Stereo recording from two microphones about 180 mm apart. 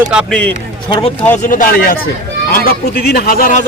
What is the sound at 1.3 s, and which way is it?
Speech, 45° left (ahead or behind).